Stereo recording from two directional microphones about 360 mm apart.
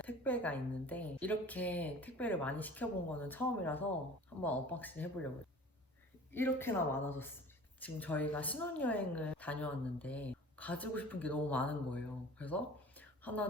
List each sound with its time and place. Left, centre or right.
0.0 s a woman's voice: centre
6.3 s a woman's voice: centre
13.0 s a sound: centre